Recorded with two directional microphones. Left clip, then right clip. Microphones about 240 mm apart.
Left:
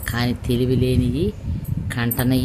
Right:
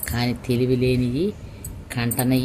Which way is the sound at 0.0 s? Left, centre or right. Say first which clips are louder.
Left 2 dB; centre.